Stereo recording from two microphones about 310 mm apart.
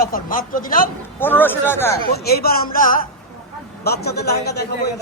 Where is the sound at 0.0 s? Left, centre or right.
Left.